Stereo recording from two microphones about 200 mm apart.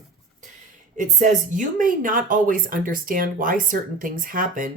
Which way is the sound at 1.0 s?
40° right (ahead or behind).